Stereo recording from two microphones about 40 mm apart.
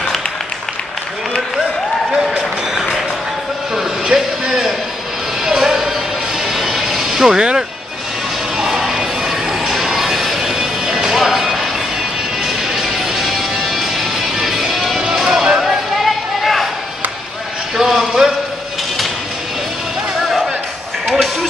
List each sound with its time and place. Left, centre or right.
4.0 s a sound: centre
6.4 s vehicle: centre
8.5 s music: centre
10.4 s music: centre
15.2 s basketball bounce: centre
17.7 s a sound: centre
20.2 s music: centre